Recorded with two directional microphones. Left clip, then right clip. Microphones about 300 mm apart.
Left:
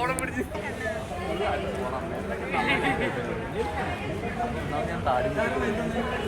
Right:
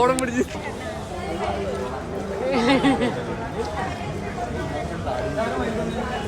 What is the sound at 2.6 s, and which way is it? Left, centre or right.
Speech, centre.